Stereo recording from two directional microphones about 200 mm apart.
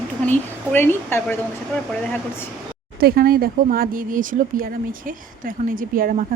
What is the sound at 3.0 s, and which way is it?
Speech, 50° right (ahead or behind).